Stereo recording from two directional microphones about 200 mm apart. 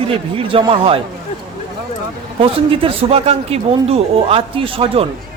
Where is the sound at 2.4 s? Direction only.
25° right (ahead or behind).